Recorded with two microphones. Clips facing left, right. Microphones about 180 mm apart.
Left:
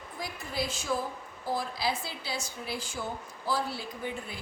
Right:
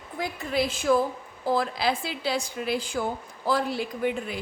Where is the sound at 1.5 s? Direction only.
75° right (ahead or behind).